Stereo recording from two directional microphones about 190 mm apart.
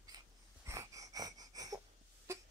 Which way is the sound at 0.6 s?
15° right (ahead or behind).